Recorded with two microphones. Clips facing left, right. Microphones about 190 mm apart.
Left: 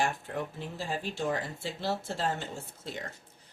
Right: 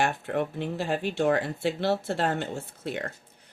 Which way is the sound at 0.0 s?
65° right (ahead or behind).